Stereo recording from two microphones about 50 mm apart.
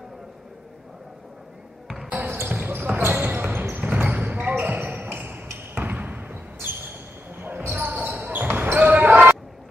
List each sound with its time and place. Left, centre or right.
2.4 s basketball bounce: right
4.9 s a sound: right
5.8 s basketball bounce: right